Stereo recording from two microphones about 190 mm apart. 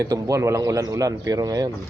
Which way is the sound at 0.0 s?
15° right (ahead or behind).